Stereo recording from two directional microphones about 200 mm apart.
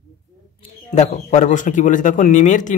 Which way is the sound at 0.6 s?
35° left (ahead or behind).